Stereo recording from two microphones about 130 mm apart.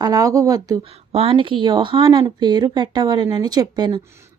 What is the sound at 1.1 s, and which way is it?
Speech, 50° right (ahead or behind).